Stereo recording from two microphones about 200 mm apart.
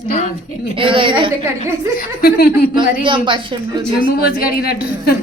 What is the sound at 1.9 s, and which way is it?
Speech, 50° left (ahead or behind).